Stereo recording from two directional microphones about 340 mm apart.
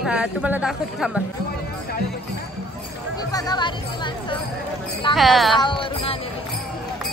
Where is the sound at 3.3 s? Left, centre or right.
Centre.